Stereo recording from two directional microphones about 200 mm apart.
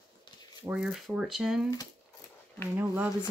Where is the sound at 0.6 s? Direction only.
5° right (ahead or behind).